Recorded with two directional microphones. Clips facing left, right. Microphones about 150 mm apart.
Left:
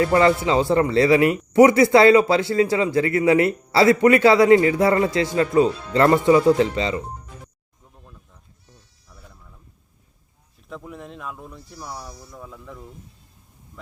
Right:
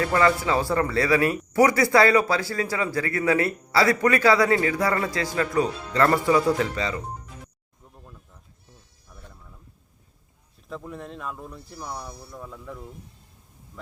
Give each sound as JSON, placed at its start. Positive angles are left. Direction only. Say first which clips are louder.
{"t": 0.0, "sound": "speech", "louder": "left 4 dB", "side_deg": 25}
{"t": 10.7, "sound": "speech", "louder": "even", "side_deg": 0}